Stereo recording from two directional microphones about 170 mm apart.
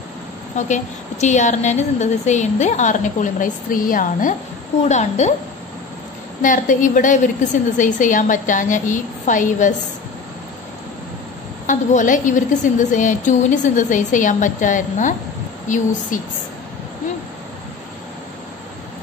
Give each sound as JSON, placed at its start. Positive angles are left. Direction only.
{"t": 0.6, "sound": "a woman's voice", "side_deg": 45}
{"t": 6.4, "sound": "a woman's voice", "side_deg": 50}
{"t": 11.6, "sound": "a woman's voice", "side_deg": 50}